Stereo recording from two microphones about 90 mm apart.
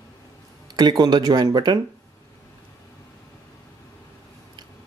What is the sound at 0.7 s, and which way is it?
Speech, 50° right (ahead or behind).